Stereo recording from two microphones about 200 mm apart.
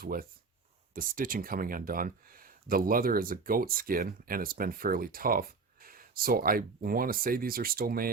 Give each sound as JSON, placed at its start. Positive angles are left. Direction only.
{"t": 0.0, "sound": "speech", "side_deg": -45}